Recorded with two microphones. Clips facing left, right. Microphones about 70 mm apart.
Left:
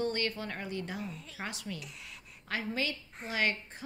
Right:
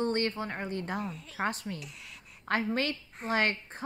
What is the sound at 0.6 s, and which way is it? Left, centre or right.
A woman's voice, right.